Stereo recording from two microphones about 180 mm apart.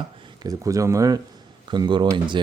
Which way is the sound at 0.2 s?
20° right (ahead or behind).